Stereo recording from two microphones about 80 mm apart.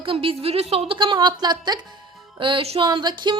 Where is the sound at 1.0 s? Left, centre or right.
Right.